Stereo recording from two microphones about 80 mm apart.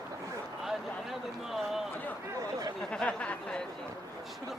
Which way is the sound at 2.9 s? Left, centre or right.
Centre.